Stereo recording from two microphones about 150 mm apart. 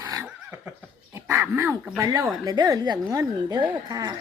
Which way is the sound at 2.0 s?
25° right (ahead or behind).